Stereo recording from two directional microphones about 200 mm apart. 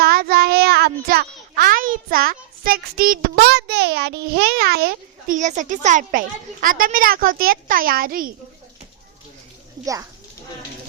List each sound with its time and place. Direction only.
0.0 s a child's voice: 50° right (ahead or behind)
9.8 s speech: 15° right (ahead or behind)